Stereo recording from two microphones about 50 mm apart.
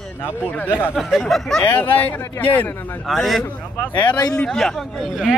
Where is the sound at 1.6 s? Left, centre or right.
Left.